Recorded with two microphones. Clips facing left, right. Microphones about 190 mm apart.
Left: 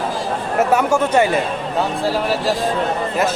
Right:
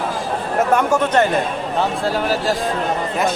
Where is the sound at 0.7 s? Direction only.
10° left (ahead or behind).